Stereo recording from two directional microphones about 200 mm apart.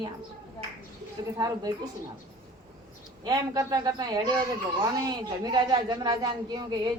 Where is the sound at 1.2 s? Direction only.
20° right (ahead or behind).